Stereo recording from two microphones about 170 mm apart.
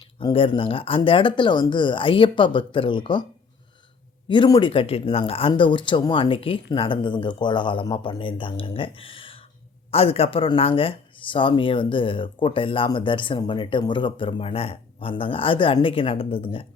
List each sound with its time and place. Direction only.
0.2 s speech: 30° left (ahead or behind)
4.3 s speech: 25° left (ahead or behind)